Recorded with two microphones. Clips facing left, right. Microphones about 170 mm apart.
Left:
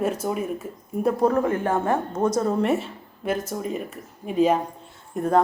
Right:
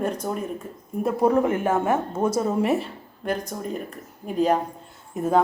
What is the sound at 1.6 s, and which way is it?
Speech, 5° right (ahead or behind).